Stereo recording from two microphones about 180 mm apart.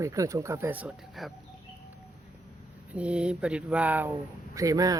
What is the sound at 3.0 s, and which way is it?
Speech, 5° right (ahead or behind).